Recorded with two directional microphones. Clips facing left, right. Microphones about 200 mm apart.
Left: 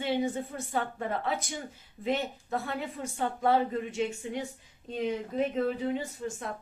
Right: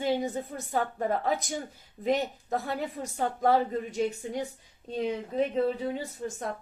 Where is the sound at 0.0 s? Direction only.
40° right (ahead or behind).